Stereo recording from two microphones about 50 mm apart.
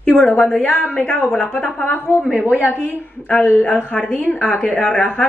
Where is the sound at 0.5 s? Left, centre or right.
Left.